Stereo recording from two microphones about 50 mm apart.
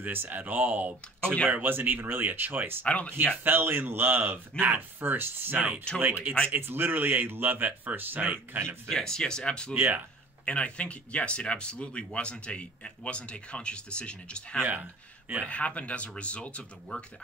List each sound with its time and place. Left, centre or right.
0.0 s speech: right
2.8 s speech: left
3.4 s speech: right
8.8 s speech: centre
9.8 s speech: right
10.4 s speech: left
14.6 s speech: right
15.4 s speech: left